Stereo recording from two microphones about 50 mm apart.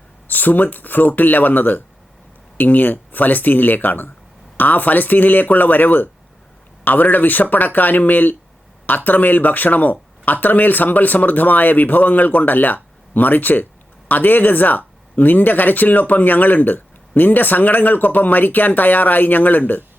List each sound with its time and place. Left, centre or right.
0.3 s speech: left